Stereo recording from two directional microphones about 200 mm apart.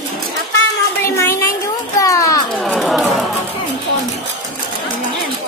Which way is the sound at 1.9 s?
15° left (ahead or behind).